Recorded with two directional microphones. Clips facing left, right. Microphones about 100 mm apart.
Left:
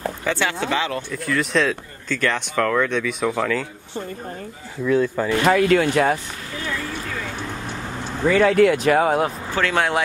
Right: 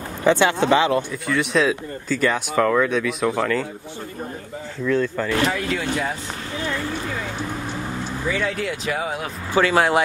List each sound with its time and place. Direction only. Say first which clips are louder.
0.2 s speech: right 9 dB; 20° right (ahead or behind)
1.1 s speech: even; centre (ahead or behind)
4.8 s speech: left 2 dB; 10° left (ahead or behind)
5.5 s speech: left 8 dB; 65° left (ahead or behind)
8.3 s speech: left 11 dB; 60° left (ahead or behind)
9.5 s speech: right 7 dB; 5° right (ahead or behind)